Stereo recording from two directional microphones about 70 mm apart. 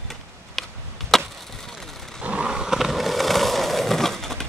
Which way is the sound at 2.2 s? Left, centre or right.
Centre.